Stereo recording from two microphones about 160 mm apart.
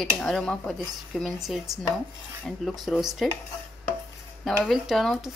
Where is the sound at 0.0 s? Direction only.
5° left (ahead or behind).